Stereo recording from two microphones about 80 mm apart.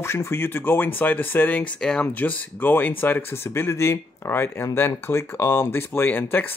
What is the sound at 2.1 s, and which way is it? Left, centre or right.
Speech, left.